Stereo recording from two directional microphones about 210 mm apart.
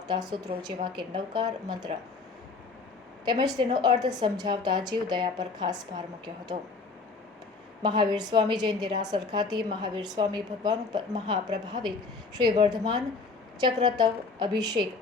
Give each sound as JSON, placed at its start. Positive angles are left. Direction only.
{"t": 0.1, "sound": "a woman's voice", "side_deg": -20}
{"t": 3.2, "sound": "a woman's voice", "side_deg": -20}
{"t": 7.8, "sound": "a woman's voice", "side_deg": -20}
{"t": 14.0, "sound": "a woman's voice", "side_deg": -20}